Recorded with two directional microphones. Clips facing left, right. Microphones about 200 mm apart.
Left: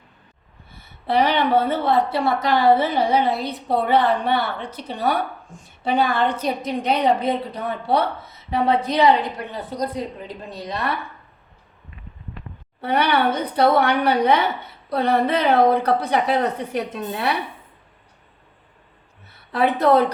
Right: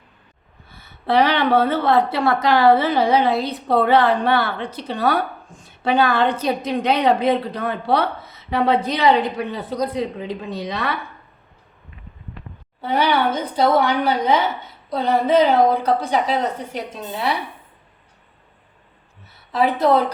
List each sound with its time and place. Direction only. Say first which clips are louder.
0.8 s a woman's voice: right 2 dB; 90° right
10.0 s a woman's voice: right 5 dB; 90° right
12.8 s a woman's voice: even; 60° left (ahead or behind)
19.3 s a woman's voice: right 1 dB; 60° left (ahead or behind)